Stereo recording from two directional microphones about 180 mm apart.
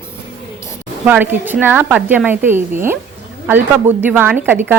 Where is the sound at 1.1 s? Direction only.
10° right (ahead or behind).